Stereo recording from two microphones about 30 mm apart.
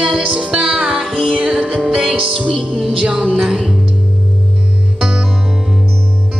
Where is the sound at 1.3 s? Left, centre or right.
Right.